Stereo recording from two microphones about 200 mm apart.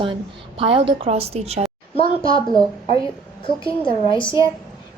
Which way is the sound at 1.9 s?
25° left (ahead or behind).